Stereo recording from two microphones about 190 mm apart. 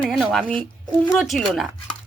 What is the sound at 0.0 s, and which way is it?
A woman's voice, centre (ahead or behind).